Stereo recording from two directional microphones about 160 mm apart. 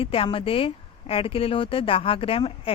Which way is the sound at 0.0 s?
35° left (ahead or behind).